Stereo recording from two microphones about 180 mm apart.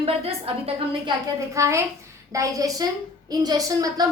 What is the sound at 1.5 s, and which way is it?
A woman's voice, 15° right (ahead or behind).